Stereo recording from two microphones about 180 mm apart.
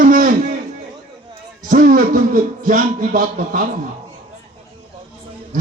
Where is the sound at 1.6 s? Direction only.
50° right (ahead or behind).